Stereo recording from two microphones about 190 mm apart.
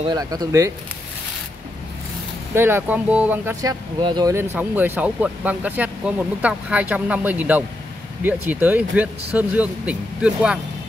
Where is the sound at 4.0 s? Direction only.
20° right (ahead or behind); by 10.6 s 5° right (ahead or behind).